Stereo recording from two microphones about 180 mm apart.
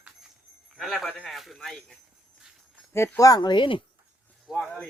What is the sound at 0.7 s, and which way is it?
Speech, centre (ahead or behind).